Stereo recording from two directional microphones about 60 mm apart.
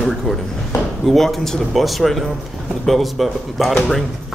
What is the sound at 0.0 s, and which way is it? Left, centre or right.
Speech, centre.